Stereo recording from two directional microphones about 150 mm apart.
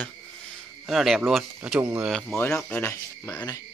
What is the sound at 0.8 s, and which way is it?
Speech, centre (ahead or behind).